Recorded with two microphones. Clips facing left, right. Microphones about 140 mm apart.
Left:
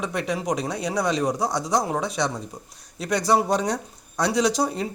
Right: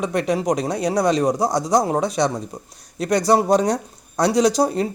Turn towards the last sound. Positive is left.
turn(degrees=-40)  # may be behind; listen again after turning